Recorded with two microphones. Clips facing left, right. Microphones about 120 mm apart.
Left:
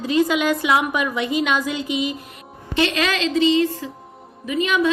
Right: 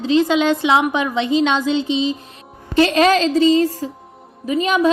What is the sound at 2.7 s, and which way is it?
Music, 40° right (ahead or behind).